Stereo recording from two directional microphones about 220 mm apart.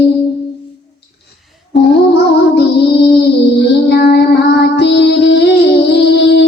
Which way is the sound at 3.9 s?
45° left (ahead or behind).